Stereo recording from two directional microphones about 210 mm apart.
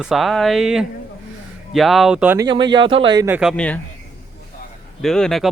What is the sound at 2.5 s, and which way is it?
Speech, 20° right (ahead or behind).